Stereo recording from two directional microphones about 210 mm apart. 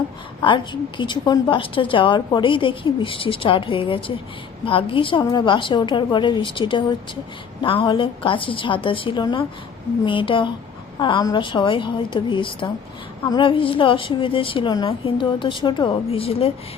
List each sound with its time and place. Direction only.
0.4 s a woman's voice: 25° left (ahead or behind)